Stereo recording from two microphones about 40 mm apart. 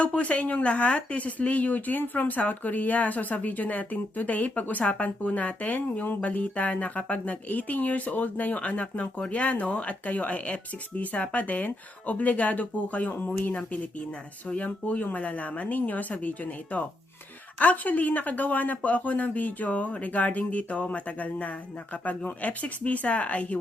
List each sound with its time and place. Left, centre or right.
0.0 s speech: left